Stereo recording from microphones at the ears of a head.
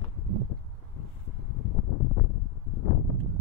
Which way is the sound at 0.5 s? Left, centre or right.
Left.